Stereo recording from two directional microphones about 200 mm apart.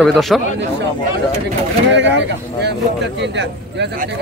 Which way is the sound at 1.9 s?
60° right (ahead or behind).